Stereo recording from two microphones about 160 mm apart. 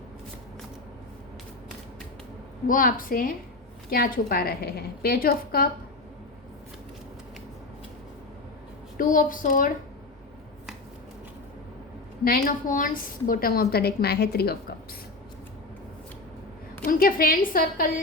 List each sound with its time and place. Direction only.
2.6 s a woman's voice: 60° left (ahead or behind)
9.0 s a woman's voice: 60° left (ahead or behind)
12.2 s a woman's voice: 65° left (ahead or behind)
16.8 s a woman's voice: 65° left (ahead or behind)